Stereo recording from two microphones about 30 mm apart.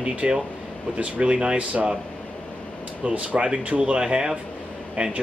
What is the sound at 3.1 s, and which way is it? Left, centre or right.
Speech, right.